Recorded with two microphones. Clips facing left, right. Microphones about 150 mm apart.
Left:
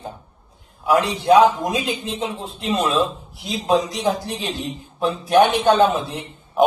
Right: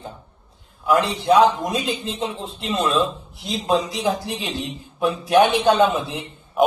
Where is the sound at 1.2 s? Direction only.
Centre (ahead or behind).